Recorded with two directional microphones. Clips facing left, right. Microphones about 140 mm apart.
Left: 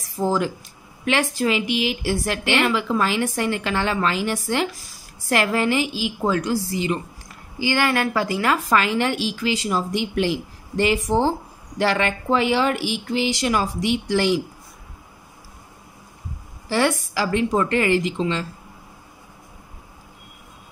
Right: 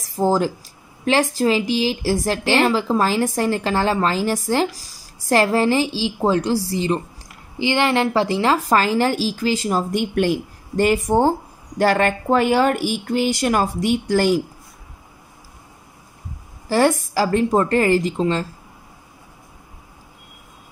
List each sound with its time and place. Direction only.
0.0 s a woman's voice: 35° right (ahead or behind)
8.5 s speech: 40° right (ahead or behind)
16.6 s a woman's voice: 40° right (ahead or behind)